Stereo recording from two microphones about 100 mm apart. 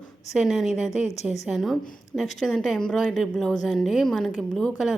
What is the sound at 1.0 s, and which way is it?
Speech, 90° left.